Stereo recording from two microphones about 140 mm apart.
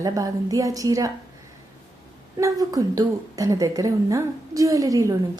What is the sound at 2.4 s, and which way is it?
A woman's voice, 25° right (ahead or behind).